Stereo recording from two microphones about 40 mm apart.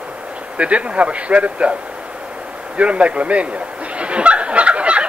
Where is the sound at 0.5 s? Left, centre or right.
Right.